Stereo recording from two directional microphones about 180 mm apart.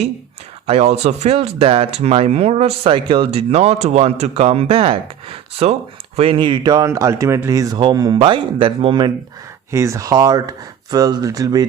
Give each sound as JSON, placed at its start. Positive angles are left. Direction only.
{"t": 0.7, "sound": "speech", "side_deg": -35}